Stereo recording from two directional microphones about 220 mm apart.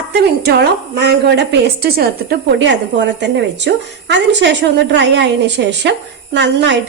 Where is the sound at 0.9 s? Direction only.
50° right (ahead or behind).